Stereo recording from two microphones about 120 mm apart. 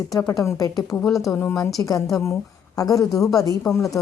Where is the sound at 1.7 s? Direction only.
30° left (ahead or behind).